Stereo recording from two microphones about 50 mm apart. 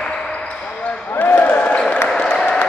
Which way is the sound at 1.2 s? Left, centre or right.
Left.